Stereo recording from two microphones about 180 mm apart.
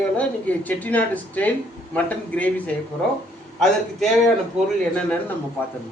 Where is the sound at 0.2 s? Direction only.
10° left (ahead or behind).